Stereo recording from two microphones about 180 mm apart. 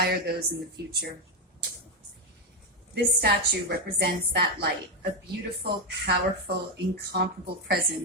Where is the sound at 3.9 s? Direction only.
65° right (ahead or behind).